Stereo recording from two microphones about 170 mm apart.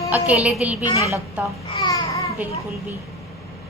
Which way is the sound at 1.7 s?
25° left (ahead or behind).